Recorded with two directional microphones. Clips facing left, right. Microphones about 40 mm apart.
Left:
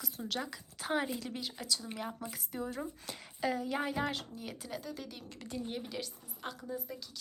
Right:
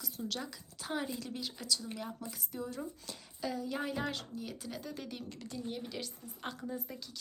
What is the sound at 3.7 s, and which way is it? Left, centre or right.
Speech, centre.